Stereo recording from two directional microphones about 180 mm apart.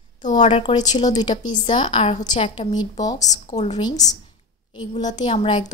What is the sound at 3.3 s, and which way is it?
Speech, 40° left (ahead or behind).